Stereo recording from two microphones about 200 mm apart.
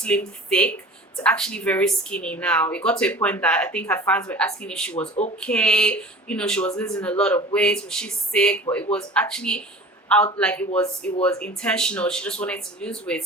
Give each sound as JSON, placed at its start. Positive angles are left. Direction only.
{"t": 0.0, "sound": "speech", "side_deg": 5}